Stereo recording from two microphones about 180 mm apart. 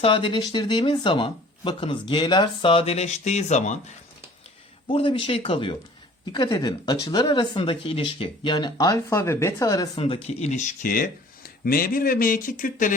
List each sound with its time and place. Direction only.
0.0 s speech: 30° left (ahead or behind)
4.9 s speech: 30° left (ahead or behind); by 12.9 s 50° left (ahead or behind)